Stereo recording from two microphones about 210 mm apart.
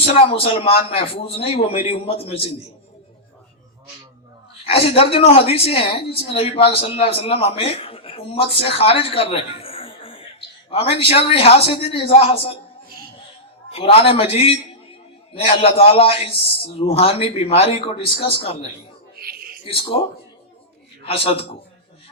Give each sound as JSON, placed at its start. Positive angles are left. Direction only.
{"t": 0.0, "sound": "a man's voice", "side_deg": 25}
{"t": 4.6, "sound": "a man's voice", "side_deg": 25}
{"t": 8.6, "sound": "a sound", "side_deg": 25}
{"t": 10.7, "sound": "a man's voice", "side_deg": 25}
{"t": 13.7, "sound": "a man's voice", "side_deg": 25}
{"t": 19.2, "sound": "a sound", "side_deg": -45}
{"t": 19.6, "sound": "a man's voice", "side_deg": 25}
{"t": 21.0, "sound": "a man's voice", "side_deg": 25}